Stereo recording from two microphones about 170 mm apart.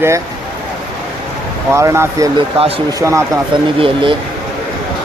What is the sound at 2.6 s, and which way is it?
Speech, 35° right (ahead or behind).